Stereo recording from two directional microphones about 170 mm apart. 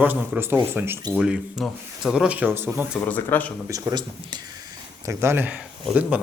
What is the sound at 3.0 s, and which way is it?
Speech, 10° left (ahead or behind).